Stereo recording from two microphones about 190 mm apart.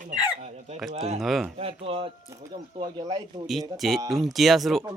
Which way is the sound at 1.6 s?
30° right (ahead or behind).